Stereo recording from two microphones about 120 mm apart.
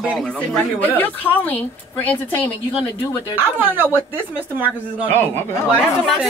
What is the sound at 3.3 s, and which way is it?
Speech, 15° right (ahead or behind).